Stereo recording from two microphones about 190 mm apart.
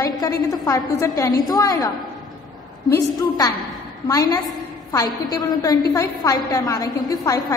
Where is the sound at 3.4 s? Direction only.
20° left (ahead or behind).